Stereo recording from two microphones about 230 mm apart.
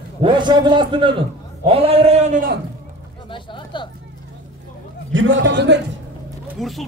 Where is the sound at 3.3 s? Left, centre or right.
Left.